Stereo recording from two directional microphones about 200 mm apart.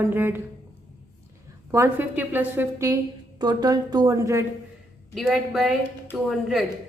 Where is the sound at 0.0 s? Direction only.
10° right (ahead or behind).